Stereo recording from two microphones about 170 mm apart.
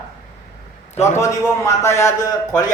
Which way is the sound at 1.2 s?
20° left (ahead or behind).